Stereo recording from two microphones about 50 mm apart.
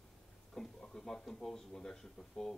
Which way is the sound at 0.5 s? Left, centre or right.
Centre.